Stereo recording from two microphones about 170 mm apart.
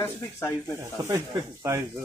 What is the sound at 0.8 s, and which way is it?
Speech, 20° right (ahead or behind).